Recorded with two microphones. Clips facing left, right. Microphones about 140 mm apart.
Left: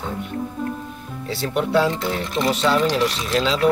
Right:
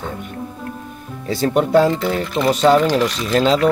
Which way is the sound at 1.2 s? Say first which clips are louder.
Right 6 dB; 45° right (ahead or behind).